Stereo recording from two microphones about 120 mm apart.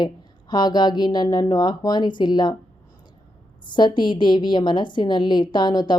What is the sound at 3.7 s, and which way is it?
A woman's voice, 40° left (ahead or behind).